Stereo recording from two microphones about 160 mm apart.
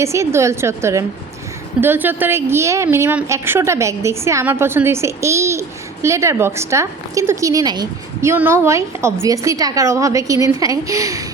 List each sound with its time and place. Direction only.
0.0 s a woman's voice: 15° right (ahead or behind)
8.3 s a woman's voice: 15° right (ahead or behind)